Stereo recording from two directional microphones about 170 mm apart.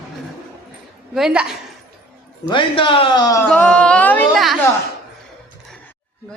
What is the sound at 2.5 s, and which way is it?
Speech, 30° left (ahead or behind).